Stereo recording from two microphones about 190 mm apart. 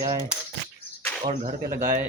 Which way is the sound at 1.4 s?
45° right (ahead or behind).